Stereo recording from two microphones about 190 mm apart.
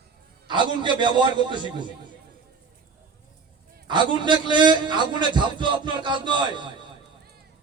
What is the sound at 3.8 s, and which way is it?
A man's voice, 25° right (ahead or behind).